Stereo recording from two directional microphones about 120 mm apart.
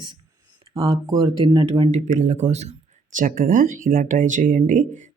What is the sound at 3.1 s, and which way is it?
Speech, 90° right.